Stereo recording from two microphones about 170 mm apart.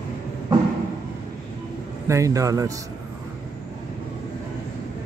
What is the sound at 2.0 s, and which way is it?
Speech, 20° right (ahead or behind).